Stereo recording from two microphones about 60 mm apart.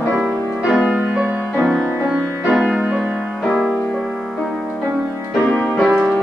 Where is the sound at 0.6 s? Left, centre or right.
Centre.